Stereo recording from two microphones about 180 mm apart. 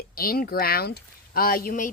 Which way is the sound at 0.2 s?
55° left (ahead or behind).